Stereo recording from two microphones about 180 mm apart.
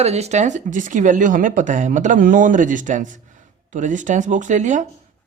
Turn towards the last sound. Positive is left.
turn(degrees=-45)  # may be behind; listen again after turning